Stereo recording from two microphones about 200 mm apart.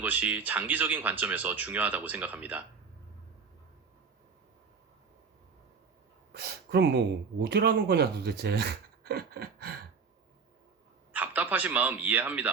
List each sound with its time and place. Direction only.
0.0 s speech: 10° right (ahead or behind)
6.3 s speech: 55° right (ahead or behind)
11.1 s a man's voice: 10° right (ahead or behind)